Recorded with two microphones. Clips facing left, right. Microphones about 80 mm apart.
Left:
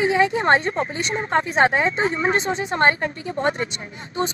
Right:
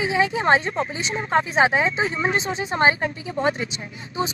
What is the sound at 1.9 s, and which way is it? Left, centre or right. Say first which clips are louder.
Speech: left 2 dB; left.